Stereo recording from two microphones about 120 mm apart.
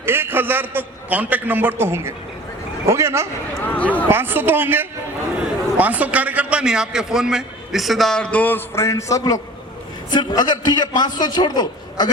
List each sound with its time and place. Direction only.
0.0 s a man's voice: 20° right (ahead or behind)
3.7 s speech: 10° left (ahead or behind)
4.1 s a man's voice: 15° right (ahead or behind); by 12.0 s 35° left (ahead or behind)